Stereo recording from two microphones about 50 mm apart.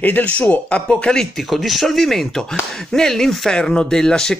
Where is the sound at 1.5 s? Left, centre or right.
Centre.